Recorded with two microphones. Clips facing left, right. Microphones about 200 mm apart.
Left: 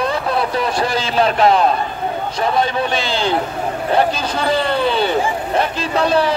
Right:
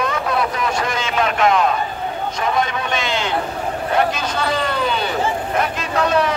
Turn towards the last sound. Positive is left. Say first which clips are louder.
# left 2 dB
turn(degrees=30)  # may be behind; listen again after turning